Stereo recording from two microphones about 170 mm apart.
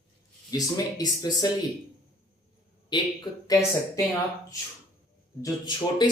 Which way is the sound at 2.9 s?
25° left (ahead or behind).